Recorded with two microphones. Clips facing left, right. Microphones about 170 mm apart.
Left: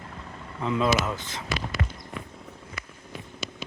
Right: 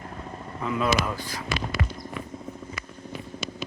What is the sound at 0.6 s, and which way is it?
Speech, 25° left (ahead or behind).